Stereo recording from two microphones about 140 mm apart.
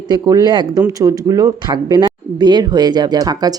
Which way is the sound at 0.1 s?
25° right (ahead or behind).